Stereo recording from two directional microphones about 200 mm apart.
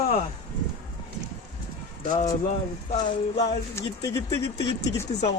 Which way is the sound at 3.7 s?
15° left (ahead or behind).